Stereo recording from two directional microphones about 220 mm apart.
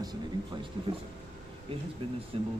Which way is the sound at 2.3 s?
25° right (ahead or behind).